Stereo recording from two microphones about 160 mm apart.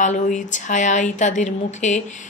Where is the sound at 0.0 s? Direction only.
50° left (ahead or behind).